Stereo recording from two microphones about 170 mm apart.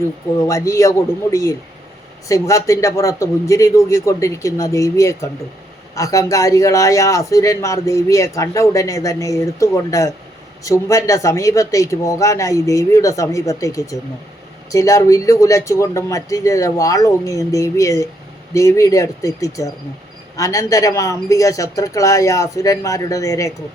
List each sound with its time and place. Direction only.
0.3 s a man's voice: 20° left (ahead or behind)